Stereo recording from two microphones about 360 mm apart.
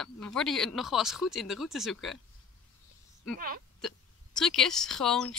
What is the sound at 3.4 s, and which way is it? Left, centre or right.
Speech, right.